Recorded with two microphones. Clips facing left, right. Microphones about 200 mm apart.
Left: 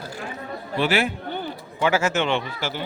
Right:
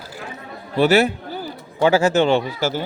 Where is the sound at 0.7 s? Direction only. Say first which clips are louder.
Right 7 dB; 40° right (ahead or behind).